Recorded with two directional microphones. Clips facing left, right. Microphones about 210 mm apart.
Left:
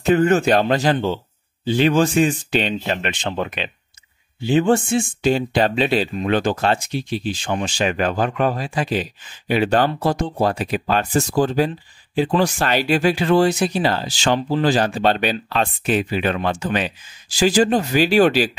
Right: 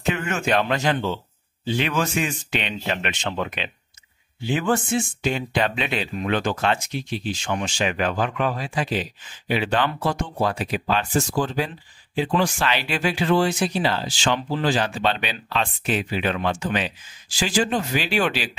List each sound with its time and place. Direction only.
0.0 s speech: 35° left (ahead or behind)